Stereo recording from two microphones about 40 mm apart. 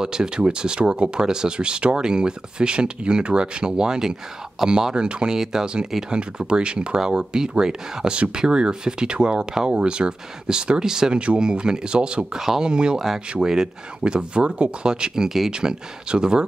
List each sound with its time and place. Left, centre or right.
0.0 s speech: centre
12.4 s speech: centre
12.6 s speech: right
15.2 s speech: centre
15.5 s speech: right